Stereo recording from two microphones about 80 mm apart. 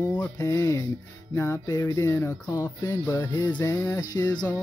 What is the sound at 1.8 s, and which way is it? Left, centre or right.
Speech, left.